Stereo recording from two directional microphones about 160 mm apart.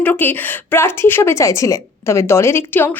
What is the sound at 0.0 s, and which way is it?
A woman's voice, 10° left (ahead or behind).